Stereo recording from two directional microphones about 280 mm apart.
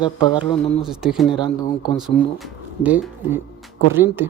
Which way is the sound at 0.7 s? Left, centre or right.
Centre.